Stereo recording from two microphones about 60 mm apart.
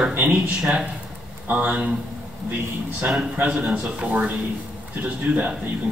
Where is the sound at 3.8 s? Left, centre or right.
Centre.